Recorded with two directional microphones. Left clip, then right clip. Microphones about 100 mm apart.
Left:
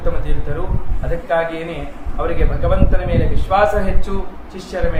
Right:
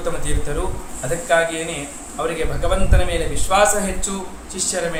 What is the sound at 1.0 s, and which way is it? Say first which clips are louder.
Speech: even; 15° right (ahead or behind).